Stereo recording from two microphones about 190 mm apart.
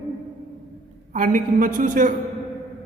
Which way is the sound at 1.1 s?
45° right (ahead or behind).